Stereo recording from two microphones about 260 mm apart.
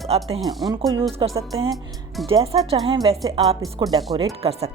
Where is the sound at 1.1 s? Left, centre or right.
Right.